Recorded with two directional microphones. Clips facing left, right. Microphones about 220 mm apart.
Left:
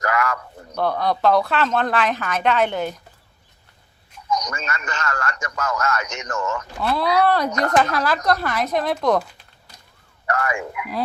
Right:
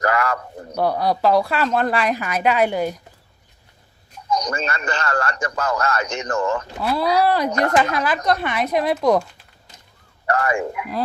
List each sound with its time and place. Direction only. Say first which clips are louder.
0.0 s a man's voice: right 2 dB; 30° right (ahead or behind)
0.8 s a woman's voice: right 1 dB; 10° right (ahead or behind)
4.3 s a man's voice: right 3 dB; 30° right (ahead or behind)
7.3 s a woman's voice: right 1 dB; 5° right (ahead or behind)
10.2 s a man's voice: right 4 dB; 30° right (ahead or behind)